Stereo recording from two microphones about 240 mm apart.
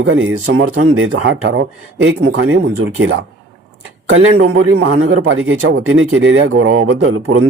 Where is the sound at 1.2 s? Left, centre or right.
Right.